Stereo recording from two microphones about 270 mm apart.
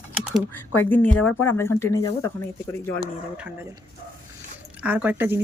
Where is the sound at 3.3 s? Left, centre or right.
Centre.